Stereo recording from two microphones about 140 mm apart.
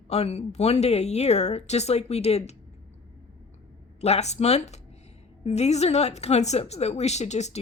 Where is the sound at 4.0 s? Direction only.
50° left (ahead or behind).